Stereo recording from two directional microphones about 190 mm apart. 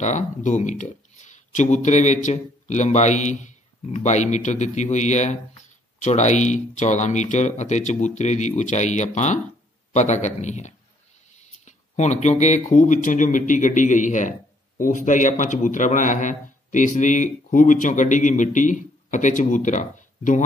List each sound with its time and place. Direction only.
0.0 s speech: 40° left (ahead or behind)